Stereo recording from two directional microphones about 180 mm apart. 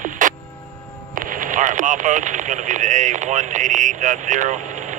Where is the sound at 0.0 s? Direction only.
45° right (ahead or behind).